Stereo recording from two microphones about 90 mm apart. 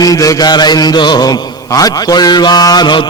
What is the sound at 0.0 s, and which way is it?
Mantra, 40° left (ahead or behind).